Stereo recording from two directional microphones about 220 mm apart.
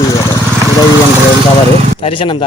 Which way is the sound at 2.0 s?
25° left (ahead or behind).